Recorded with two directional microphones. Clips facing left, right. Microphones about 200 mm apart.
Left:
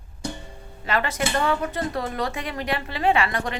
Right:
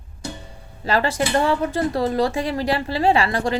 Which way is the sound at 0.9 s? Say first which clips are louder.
Right 4 dB; 30° right (ahead or behind).